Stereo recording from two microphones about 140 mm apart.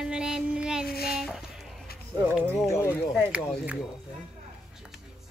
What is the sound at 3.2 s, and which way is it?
Speech, 10° right (ahead or behind).